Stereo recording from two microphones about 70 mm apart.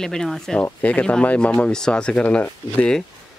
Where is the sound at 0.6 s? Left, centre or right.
Left.